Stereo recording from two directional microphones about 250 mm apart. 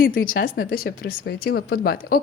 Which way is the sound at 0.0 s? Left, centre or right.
Left.